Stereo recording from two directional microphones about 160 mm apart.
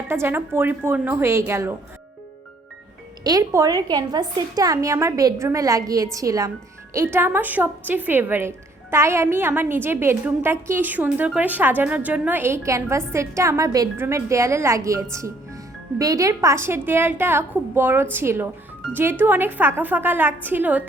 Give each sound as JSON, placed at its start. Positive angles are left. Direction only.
{"t": 0.1, "sound": "speech", "side_deg": -15}
{"t": 3.2, "sound": "a woman's voice", "side_deg": -20}